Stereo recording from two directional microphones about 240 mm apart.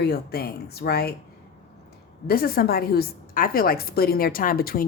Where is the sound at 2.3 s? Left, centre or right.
Left.